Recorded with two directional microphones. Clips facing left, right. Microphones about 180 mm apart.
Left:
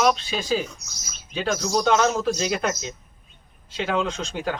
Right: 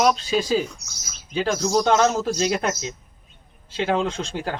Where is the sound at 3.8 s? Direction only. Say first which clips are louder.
Right 2 dB; 30° right (ahead or behind).